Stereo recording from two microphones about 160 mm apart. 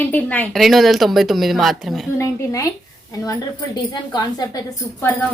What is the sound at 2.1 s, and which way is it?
Speech, 20° left (ahead or behind).